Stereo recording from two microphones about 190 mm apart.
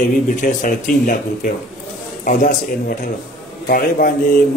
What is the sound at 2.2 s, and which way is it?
A man's voice, 40° left (ahead or behind).